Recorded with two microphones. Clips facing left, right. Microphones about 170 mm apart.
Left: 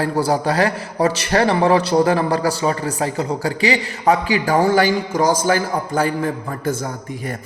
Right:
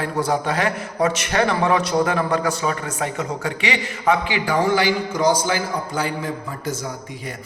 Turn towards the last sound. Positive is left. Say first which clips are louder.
# left 5 dB
turn(degrees=55)  # may be behind; listen again after turning